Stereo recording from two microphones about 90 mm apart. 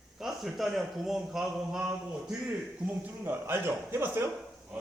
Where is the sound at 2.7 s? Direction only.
20° right (ahead or behind).